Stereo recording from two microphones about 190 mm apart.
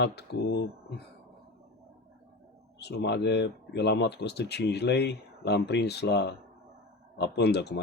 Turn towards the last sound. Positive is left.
turn(degrees=60)  # may be behind; listen again after turning